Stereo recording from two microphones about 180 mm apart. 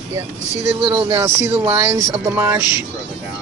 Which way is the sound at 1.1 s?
15° right (ahead or behind).